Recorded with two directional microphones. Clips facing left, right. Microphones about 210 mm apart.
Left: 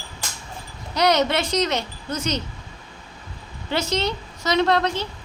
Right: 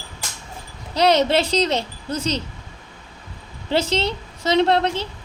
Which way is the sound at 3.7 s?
30° right (ahead or behind).